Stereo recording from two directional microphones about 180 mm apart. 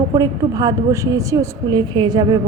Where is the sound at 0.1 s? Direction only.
20° right (ahead or behind).